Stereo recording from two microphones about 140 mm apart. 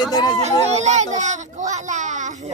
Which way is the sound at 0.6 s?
55° right (ahead or behind).